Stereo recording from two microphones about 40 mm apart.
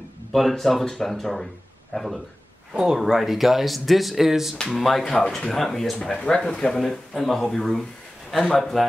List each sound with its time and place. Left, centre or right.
0.3 s speech: centre
2.7 s speech: centre
3.1 s speech: centre
4.6 s speech: centre
6.0 s speech: centre
6.8 s speech: centre